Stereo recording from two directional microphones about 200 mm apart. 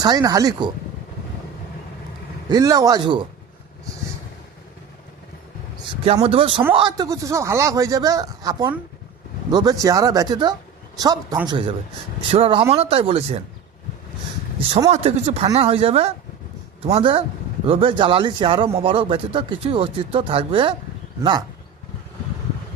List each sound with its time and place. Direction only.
0.0 s speech: 20° right (ahead or behind)
2.5 s speech: 20° right (ahead or behind)
6.2 s speech: 25° right (ahead or behind)
14.7 s speech: 30° right (ahead or behind)